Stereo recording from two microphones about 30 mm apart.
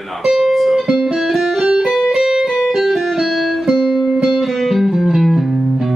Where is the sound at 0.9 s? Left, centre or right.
Centre.